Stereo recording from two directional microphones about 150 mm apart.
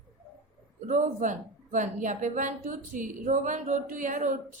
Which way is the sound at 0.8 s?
55° right (ahead or behind).